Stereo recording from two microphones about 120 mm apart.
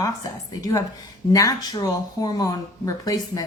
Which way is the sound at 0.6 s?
25° left (ahead or behind).